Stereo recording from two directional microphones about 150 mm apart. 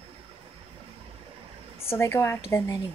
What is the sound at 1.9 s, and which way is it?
Speech, 20° left (ahead or behind).